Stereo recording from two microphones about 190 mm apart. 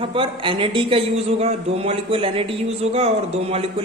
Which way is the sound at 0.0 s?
30° right (ahead or behind).